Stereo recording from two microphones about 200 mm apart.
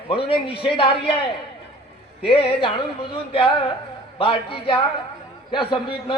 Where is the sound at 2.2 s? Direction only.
25° left (ahead or behind).